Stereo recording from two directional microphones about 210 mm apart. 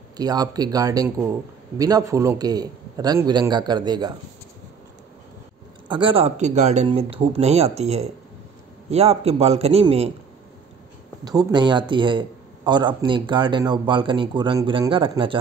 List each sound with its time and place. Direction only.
0.2 s speech: 20° right (ahead or behind)
5.9 s speech: 25° right (ahead or behind)
11.2 s speech: 20° right (ahead or behind)